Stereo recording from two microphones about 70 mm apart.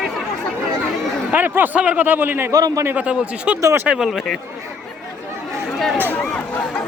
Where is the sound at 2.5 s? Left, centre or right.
Right.